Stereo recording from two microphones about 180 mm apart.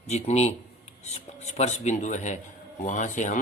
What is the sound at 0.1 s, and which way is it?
Speech, 35° left (ahead or behind).